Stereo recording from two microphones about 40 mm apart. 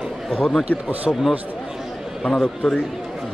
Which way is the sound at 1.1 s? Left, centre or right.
Left.